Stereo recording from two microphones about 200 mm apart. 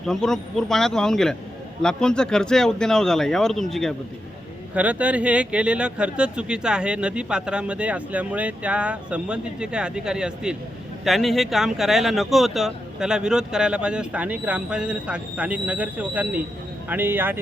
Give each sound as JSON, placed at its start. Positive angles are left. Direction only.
{"t": 0.0, "sound": "speech", "side_deg": 0}